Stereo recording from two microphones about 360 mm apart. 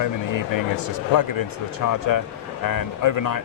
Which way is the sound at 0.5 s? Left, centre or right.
Left.